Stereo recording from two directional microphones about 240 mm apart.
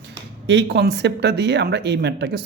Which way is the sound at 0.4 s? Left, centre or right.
Right.